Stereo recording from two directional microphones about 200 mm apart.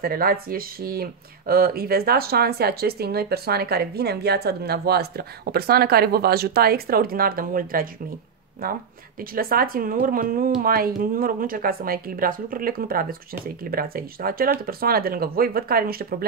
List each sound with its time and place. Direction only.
0.0 s speech: 45° right (ahead or behind)